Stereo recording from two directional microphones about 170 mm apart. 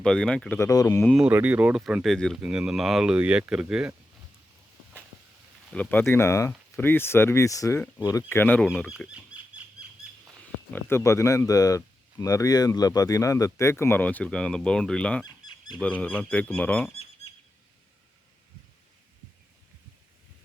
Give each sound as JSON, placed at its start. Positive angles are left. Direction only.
{"t": 0.0, "sound": "speech", "side_deg": 5}
{"t": 1.0, "sound": "speech", "side_deg": -5}
{"t": 5.7, "sound": "speech", "side_deg": 10}
{"t": 9.1, "sound": "wild animals", "side_deg": -10}
{"t": 10.7, "sound": "speech", "side_deg": 15}